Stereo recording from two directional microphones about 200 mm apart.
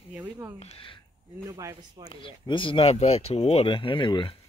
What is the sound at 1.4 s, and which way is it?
Speech, 15° right (ahead or behind).